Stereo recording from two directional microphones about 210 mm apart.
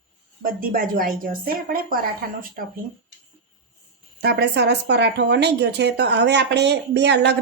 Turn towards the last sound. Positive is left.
turn(degrees=-55)  # may be behind; listen again after turning